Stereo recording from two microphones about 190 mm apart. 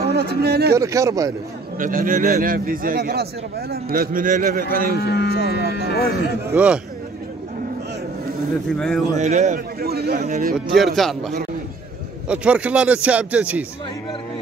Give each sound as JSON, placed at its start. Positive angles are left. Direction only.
{"t": 0.0, "sound": "a sound", "side_deg": -55}
{"t": 0.7, "sound": "a man's voice", "side_deg": -15}
{"t": 1.8, "sound": "a man's voice", "side_deg": -45}
{"t": 4.9, "sound": "speech", "side_deg": 55}
{"t": 6.5, "sound": "a man's voice", "side_deg": -5}
{"t": 8.7, "sound": "speech", "side_deg": 5}
{"t": 9.2, "sound": "a man's voice", "side_deg": -40}
{"t": 9.8, "sound": "a man's voice", "side_deg": -55}
{"t": 10.1, "sound": "a man's voice", "side_deg": -40}
{"t": 10.8, "sound": "a man's voice", "side_deg": 0}